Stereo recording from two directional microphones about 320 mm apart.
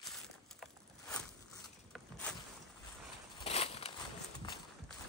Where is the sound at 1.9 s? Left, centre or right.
Centre.